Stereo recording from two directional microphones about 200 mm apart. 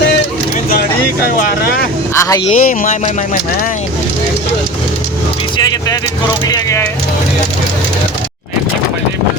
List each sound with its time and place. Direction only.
2.1 s speech: 15° left (ahead or behind)
2.5 s speech: 35° left (ahead or behind)
6.5 s speech: 15° left (ahead or behind)